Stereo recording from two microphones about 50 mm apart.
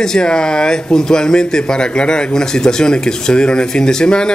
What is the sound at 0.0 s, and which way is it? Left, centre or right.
Speech, centre.